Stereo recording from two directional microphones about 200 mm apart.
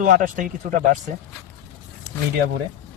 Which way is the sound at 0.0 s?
40° right (ahead or behind).